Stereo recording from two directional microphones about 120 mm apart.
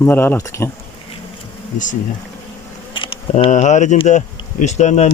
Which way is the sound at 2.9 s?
45° left (ahead or behind).